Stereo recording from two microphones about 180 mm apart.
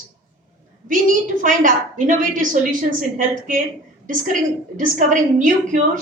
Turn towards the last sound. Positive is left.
turn(degrees=-45)  # may be behind; listen again after turning